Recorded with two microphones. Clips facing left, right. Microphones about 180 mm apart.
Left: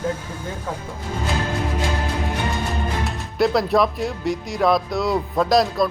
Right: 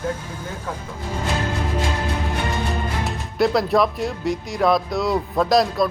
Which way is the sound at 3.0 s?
Centre (ahead or behind).